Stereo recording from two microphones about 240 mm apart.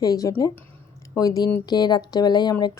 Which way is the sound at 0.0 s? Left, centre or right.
Centre.